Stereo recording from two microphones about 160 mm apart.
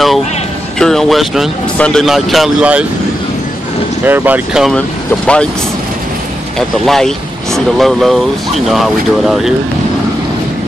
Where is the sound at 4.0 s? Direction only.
10° right (ahead or behind).